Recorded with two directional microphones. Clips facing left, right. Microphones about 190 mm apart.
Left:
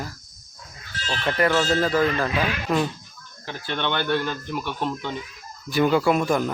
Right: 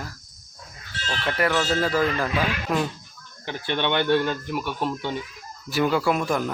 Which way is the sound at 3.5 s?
20° right (ahead or behind).